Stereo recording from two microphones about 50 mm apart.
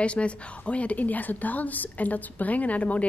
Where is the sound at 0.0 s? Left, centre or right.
Left.